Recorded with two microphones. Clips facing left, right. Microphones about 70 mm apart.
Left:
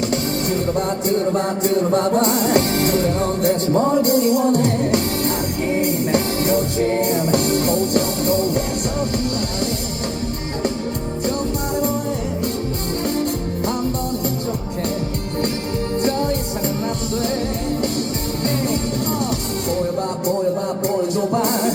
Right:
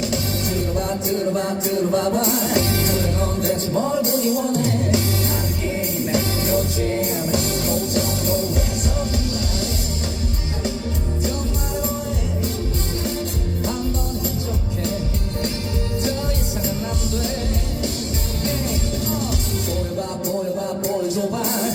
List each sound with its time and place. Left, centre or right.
0.0 s music: left
18.4 s music: left
20.8 s music: left